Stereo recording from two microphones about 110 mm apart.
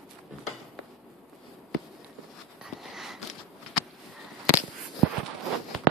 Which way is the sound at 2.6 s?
5° right (ahead or behind).